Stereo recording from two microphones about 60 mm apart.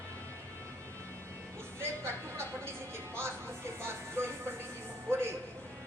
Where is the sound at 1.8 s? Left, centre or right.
Right.